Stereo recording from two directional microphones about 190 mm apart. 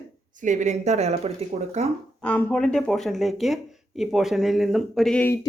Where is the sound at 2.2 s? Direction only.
5° left (ahead or behind).